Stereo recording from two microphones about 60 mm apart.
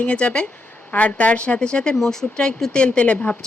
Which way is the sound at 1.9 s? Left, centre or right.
Centre.